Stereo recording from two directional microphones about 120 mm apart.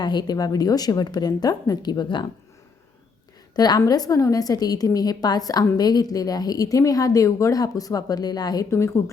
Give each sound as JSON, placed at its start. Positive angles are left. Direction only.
{"t": 0.0, "sound": "a woman's voice", "side_deg": 35}
{"t": 3.5, "sound": "a woman's voice", "side_deg": 35}